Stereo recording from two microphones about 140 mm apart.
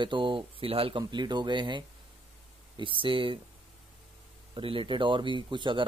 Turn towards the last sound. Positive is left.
turn(degrees=-35)  # may be behind; listen again after turning